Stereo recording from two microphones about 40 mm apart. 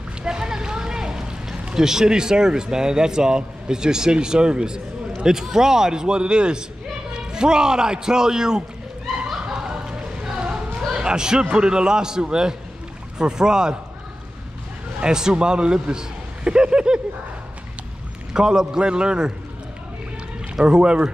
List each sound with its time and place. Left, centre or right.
0.2 s speech: centre
9.1 s a sound: centre
9.5 s a sound: centre
13.2 s a man's voice: centre
15.0 s a man's voice: centre
18.3 s a man's voice: centre
20.6 s a man's voice: right